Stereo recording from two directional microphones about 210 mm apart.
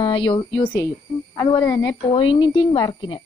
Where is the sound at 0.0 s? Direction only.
25° left (ahead or behind).